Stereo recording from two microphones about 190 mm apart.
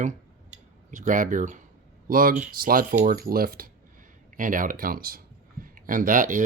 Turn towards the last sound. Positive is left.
turn(degrees=-45)  # may be behind; listen again after turning